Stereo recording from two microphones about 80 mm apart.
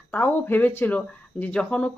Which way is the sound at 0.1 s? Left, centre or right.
Left.